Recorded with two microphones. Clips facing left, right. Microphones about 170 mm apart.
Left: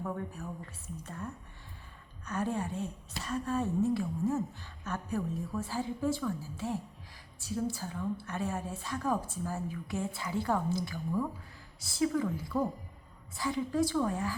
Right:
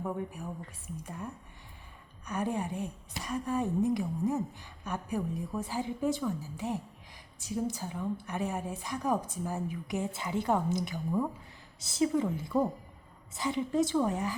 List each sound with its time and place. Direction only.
0.0 s a woman's voice: 15° right (ahead or behind)